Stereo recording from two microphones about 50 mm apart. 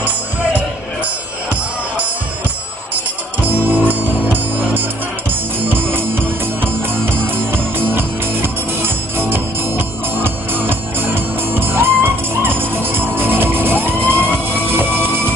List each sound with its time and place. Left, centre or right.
3.6 s music: right
13.8 s vehicle: right
14.5 s music: right